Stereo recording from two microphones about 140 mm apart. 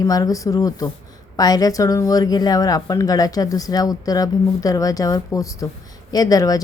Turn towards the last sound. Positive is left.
turn(degrees=25)  # may be behind; listen again after turning